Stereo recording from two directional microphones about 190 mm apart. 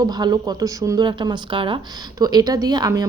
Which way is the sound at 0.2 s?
20° right (ahead or behind).